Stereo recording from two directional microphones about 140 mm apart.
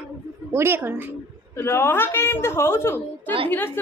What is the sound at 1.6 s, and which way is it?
A child's voice, 15° left (ahead or behind).